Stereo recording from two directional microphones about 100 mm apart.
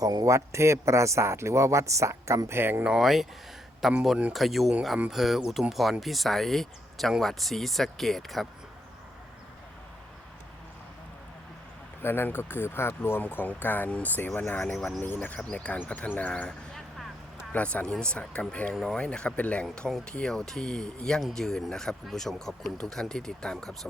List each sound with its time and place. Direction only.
0.0 s a man's voice: 35° right (ahead or behind)
2.8 s speech: 5° right (ahead or behind)
12.0 s speech: 20° left (ahead or behind)
14.6 s speech: 5° left (ahead or behind)
15.0 s speech: 20° left (ahead or behind)